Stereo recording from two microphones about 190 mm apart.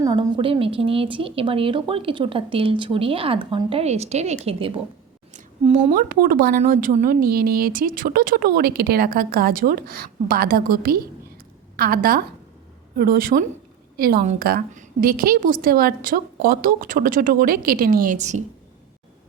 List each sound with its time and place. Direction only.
0.0 s a woman's voice: 25° right (ahead or behind); by 18.4 s 40° right (ahead or behind)